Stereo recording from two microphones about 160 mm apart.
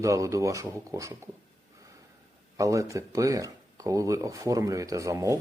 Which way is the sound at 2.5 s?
20° right (ahead or behind).